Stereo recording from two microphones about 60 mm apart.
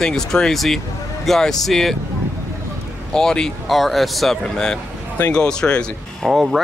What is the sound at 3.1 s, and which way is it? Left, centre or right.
A man's voice, centre.